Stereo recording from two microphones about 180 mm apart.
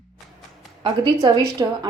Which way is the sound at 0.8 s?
25° right (ahead or behind).